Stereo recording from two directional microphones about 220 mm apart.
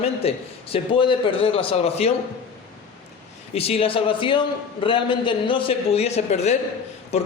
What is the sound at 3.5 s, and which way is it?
A man's voice, 25° left (ahead or behind).